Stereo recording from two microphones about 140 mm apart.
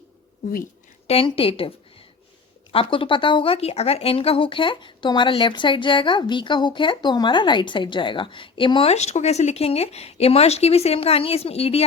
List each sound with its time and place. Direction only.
1.0 s speech: 45° left (ahead or behind)
2.7 s speech: 40° left (ahead or behind)